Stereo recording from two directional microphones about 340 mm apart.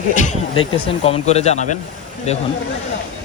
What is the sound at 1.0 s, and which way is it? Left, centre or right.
Speech, centre.